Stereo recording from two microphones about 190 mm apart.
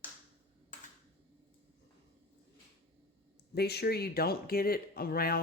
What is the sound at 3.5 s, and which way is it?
Speech, 60° left (ahead or behind).